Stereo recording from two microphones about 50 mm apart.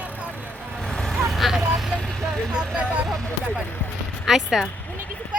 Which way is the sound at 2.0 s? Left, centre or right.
Centre.